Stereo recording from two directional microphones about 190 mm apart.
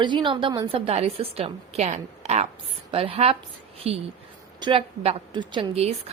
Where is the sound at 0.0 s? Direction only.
25° right (ahead or behind).